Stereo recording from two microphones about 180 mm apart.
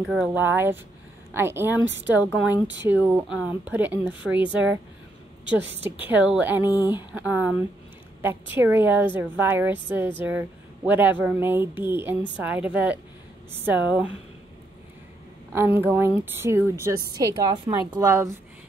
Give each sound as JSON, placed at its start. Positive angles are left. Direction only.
{"t": 0.0, "sound": "a woman's voice", "side_deg": -5}
{"t": 2.8, "sound": "a woman's voice", "side_deg": -10}
{"t": 5.9, "sound": "a woman's voice", "side_deg": -10}
{"t": 15.5, "sound": "a woman's voice", "side_deg": -15}